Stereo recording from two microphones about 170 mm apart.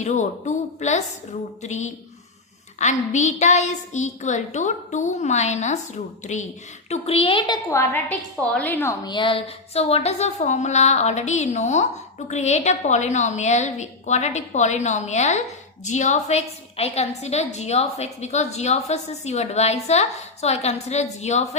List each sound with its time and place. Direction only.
0.0 s a woman's voice: 45° left (ahead or behind); by 9.0 s 10° left (ahead or behind)
9.0 s a woman's voice: 30° left (ahead or behind)